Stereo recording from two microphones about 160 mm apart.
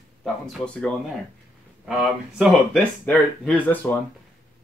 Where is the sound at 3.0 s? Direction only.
10° left (ahead or behind).